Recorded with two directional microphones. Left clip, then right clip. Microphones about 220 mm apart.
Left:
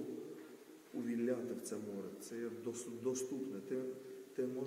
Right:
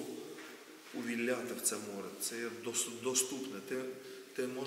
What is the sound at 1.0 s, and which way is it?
A man's voice, 5° left (ahead or behind).